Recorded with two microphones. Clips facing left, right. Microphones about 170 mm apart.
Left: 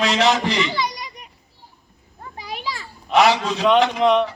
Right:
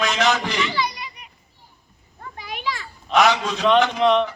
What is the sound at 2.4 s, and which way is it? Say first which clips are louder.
Children playing: right 1 dB; 35° left (ahead or behind).